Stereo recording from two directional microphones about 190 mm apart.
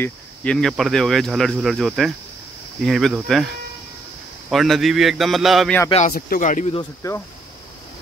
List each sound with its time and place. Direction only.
0.0 s speech: 5° left (ahead or behind)
4.5 s speech: centre (ahead or behind)
5.9 s speech: 35° left (ahead or behind)
6.1 s speech: 50° left (ahead or behind)
6.7 s speech: 20° left (ahead or behind)